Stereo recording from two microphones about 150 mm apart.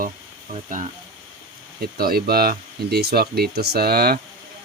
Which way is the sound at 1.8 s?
90° right.